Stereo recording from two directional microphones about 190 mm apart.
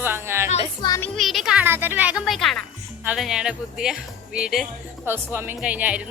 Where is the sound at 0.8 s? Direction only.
20° left (ahead or behind).